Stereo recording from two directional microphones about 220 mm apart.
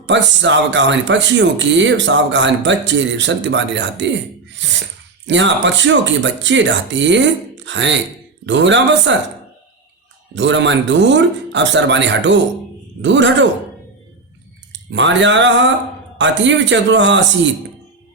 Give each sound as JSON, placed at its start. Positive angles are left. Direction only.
{"t": 0.0, "sound": "speech", "side_deg": -55}
{"t": 10.3, "sound": "speech", "side_deg": -55}
{"t": 14.7, "sound": "speech", "side_deg": -55}